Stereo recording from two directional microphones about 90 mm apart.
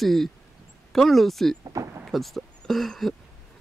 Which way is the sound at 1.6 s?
40° right (ahead or behind).